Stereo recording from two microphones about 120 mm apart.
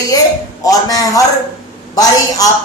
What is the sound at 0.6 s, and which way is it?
A man's voice, 30° left (ahead or behind).